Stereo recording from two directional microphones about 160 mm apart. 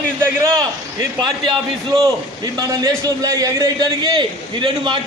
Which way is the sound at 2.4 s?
25° right (ahead or behind).